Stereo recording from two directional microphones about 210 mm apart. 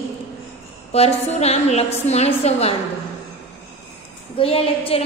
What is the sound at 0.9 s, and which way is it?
A woman's voice, 30° left (ahead or behind).